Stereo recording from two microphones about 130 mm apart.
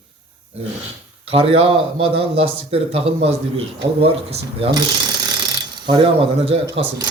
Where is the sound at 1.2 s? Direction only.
50° right (ahead or behind).